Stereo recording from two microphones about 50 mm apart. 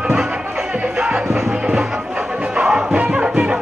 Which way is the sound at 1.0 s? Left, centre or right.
Centre.